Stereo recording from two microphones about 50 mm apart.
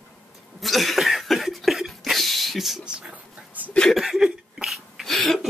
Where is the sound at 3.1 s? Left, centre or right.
Right.